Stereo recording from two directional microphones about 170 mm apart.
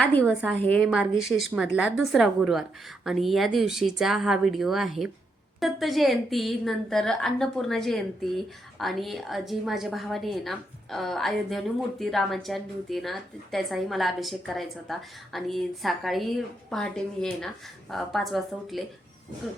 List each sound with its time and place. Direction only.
0.0 s a woman's voice: 10° left (ahead or behind)